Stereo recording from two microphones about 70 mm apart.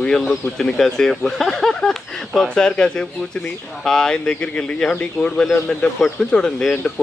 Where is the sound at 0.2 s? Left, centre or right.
Centre.